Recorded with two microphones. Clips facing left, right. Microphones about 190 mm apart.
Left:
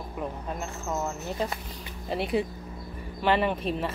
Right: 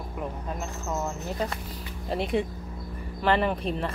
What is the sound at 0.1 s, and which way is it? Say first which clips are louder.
Speech: even; centre (ahead or behind).